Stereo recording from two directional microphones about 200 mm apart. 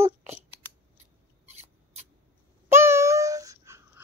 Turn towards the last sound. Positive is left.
turn(degrees=-15)  # may be behind; listen again after turning